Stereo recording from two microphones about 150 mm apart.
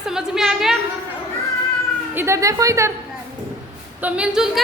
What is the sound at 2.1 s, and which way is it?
Speech, 15° right (ahead or behind).